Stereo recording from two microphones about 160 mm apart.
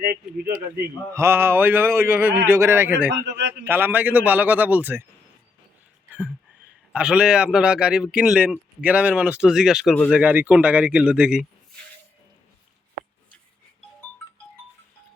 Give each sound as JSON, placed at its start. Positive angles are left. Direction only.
{"t": 0.0, "sound": "a sound", "side_deg": -70}
{"t": 1.1, "sound": "speech", "side_deg": -15}
{"t": 3.1, "sound": "a man's voice", "side_deg": -90}
{"t": 3.7, "sound": "speech", "side_deg": -10}
{"t": 6.1, "sound": "a sound", "side_deg": -10}
{"t": 6.9, "sound": "a man's voice", "side_deg": -5}